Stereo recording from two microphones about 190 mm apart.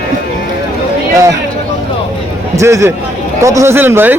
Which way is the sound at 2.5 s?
15° right (ahead or behind).